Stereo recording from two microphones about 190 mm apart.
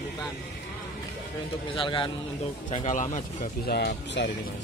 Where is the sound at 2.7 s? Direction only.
40° left (ahead or behind).